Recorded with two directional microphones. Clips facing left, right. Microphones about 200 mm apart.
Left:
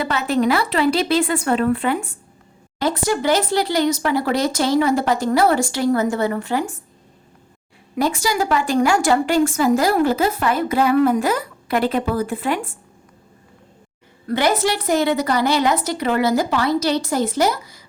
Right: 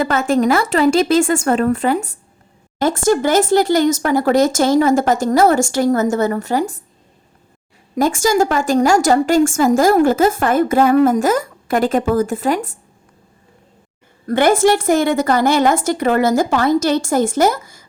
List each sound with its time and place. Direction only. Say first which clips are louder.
0.0 s a woman's voice: right 4 dB; 45° right (ahead or behind)
7.9 s a woman's voice: right 5 dB; 45° right (ahead or behind)
14.3 s a woman's voice: right 6 dB; 50° right (ahead or behind)